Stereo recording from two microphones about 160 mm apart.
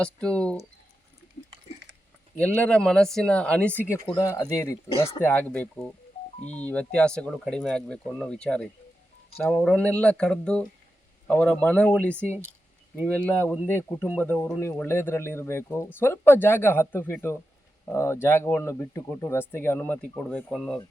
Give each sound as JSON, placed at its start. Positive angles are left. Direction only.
{"t": 0.0, "sound": "speech", "side_deg": 5}
{"t": 2.3, "sound": "speech", "side_deg": 10}
{"t": 4.0, "sound": "speech", "side_deg": 25}
{"t": 4.9, "sound": "speech", "side_deg": 35}
{"t": 5.2, "sound": "speech", "side_deg": 10}